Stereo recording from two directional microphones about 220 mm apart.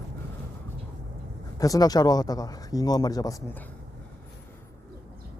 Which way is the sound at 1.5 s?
15° left (ahead or behind).